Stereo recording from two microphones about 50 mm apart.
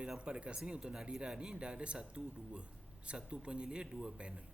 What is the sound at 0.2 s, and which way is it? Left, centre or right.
Speech, right.